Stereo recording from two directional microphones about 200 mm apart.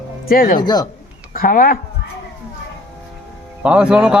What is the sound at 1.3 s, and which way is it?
Speech, 45° left (ahead or behind).